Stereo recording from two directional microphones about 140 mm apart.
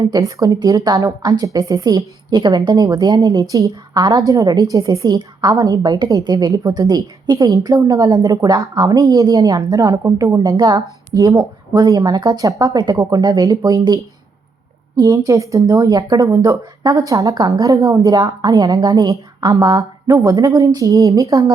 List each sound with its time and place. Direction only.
0.0 s a woman's voice: 25° right (ahead or behind)